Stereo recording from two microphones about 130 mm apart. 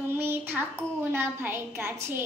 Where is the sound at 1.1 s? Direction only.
20° right (ahead or behind).